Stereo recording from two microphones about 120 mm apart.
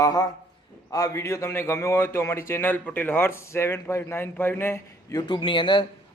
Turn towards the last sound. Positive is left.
turn(degrees=45)  # may be behind; listen again after turning